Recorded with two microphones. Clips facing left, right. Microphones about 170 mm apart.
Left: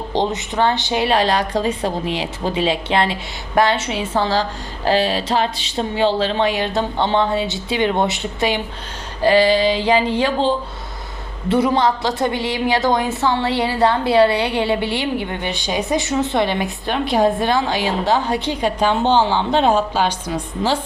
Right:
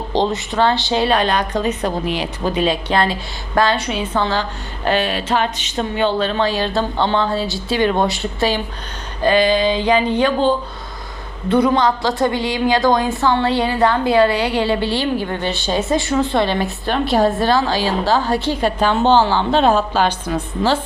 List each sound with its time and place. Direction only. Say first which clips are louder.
0.2 s a woman's voice: right 2 dB; 20° left (ahead or behind)
9.2 s mantra: left 1 dB; 30° left (ahead or behind)
10.2 s a woman's voice: right 2 dB; 30° left (ahead or behind)